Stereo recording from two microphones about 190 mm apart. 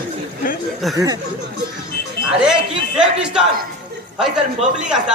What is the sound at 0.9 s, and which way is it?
Speech, 20° right (ahead or behind).